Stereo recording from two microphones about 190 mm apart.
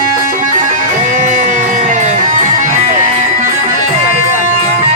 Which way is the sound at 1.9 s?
40° right (ahead or behind).